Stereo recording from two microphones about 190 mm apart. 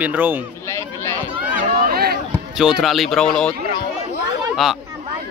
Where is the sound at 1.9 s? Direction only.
55° right (ahead or behind).